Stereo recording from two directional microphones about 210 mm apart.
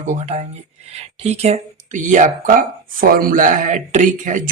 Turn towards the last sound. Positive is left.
turn(degrees=-40)  # may be behind; listen again after turning